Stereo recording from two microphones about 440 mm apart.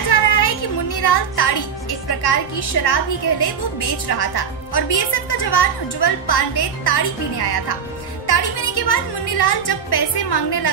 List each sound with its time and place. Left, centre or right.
0.1 s a sound: left
1.0 s a woman's voice: left
8.3 s music: left
9.4 s a woman's voice: left